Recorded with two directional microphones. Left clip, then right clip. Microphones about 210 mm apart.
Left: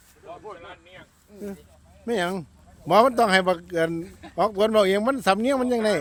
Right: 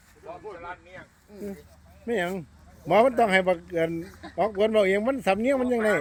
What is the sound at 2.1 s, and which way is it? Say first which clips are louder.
Speech: left 2 dB; 20° left (ahead or behind).